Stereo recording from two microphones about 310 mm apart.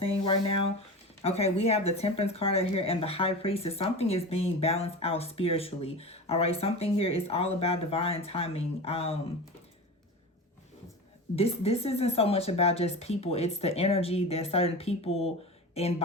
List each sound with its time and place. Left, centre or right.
0.0 s speech: centre
11.3 s speech: centre